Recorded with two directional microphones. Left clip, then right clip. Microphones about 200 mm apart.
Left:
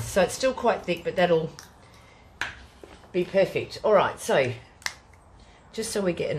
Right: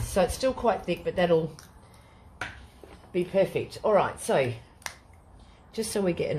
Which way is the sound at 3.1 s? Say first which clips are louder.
Left 2 dB; 20° right (ahead or behind).